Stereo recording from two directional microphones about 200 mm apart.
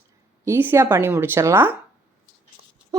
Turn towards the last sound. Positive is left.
turn(degrees=-20)  # may be behind; listen again after turning